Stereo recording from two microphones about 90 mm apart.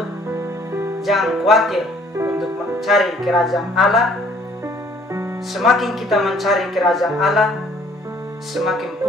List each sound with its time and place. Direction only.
0.3 s music: 30° right (ahead or behind)
1.0 s speech: centre (ahead or behind)
5.5 s speech: centre (ahead or behind)
8.5 s speech: centre (ahead or behind)